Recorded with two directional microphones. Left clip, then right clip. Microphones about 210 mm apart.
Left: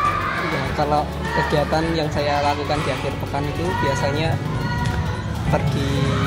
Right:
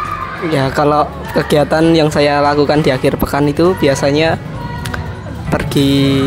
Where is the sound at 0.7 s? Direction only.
50° right (ahead or behind).